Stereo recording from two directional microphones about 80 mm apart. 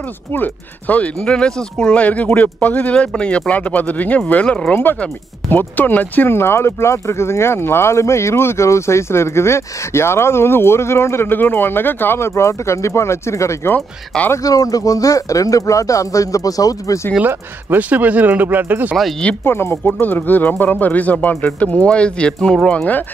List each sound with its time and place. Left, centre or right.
0.3 s speech: left
13.7 s speech: centre
14.3 s speech: left
17.2 s speech: right
19.4 s speech: left